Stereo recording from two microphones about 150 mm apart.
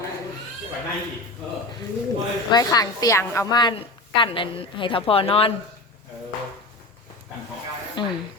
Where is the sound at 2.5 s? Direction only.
25° left (ahead or behind).